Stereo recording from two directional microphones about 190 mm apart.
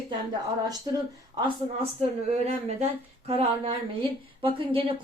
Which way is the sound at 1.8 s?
35° right (ahead or behind).